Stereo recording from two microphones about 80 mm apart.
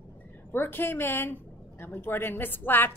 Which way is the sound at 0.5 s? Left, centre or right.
Left.